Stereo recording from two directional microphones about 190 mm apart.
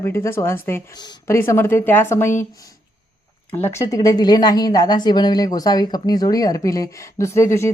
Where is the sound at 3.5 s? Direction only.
15° left (ahead or behind).